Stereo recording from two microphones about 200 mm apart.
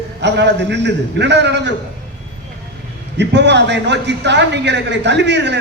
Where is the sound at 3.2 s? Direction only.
60° right (ahead or behind).